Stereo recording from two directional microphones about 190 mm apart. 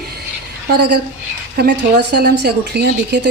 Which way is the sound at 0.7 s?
60° right (ahead or behind).